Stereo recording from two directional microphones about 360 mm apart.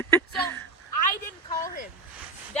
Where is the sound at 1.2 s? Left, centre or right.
Centre.